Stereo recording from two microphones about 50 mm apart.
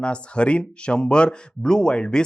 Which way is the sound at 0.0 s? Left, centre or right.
Left.